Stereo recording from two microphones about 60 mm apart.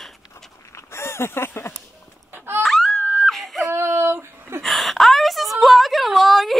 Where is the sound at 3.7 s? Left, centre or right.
Right.